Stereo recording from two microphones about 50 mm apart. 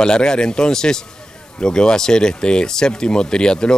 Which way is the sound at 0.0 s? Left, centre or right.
Centre.